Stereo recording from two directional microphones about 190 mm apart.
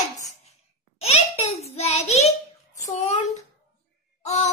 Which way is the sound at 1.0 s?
35° left (ahead or behind).